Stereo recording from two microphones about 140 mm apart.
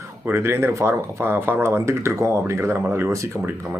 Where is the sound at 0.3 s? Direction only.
15° right (ahead or behind).